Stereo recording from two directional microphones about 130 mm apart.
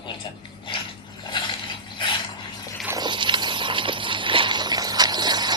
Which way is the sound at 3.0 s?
35° right (ahead or behind).